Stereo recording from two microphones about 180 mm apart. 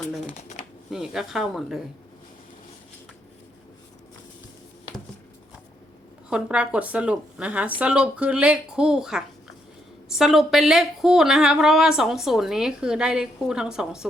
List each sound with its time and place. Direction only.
0.0 s shuffling cards: centre (ahead or behind)
0.3 s shuffling cards: 40° left (ahead or behind)
0.9 s a woman's voice: centre (ahead or behind)
6.3 s a woman's voice: 5° right (ahead or behind)